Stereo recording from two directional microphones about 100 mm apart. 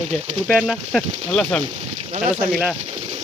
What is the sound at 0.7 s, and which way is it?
Speech, 5° left (ahead or behind).